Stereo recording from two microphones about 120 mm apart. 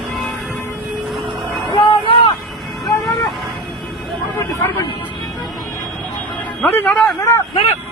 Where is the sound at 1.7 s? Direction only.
45° left (ahead or behind).